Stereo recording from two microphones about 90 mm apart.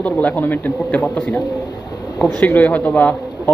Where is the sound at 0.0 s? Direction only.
15° left (ahead or behind).